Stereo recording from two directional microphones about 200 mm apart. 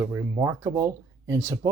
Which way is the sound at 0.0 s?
15° right (ahead or behind).